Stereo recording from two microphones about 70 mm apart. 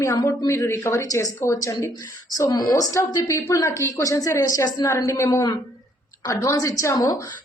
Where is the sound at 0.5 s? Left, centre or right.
Left.